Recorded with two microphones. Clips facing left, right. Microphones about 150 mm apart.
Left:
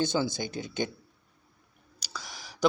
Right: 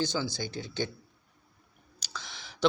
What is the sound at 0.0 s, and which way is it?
Speech, 20° left (ahead or behind).